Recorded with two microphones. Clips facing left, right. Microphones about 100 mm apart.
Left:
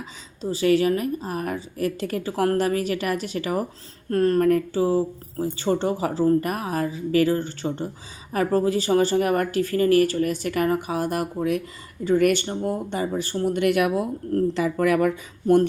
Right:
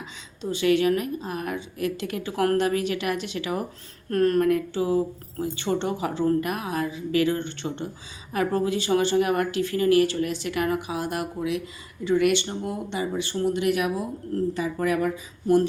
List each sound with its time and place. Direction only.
0.4 s a woman's voice: 35° left (ahead or behind)
4.1 s a woman's voice: 30° left (ahead or behind); by 15.6 s 60° left (ahead or behind)